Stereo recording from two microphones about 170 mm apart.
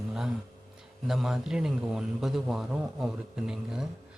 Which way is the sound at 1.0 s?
Centre (ahead or behind).